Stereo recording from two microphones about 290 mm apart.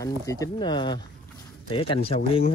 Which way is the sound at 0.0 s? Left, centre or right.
Centre.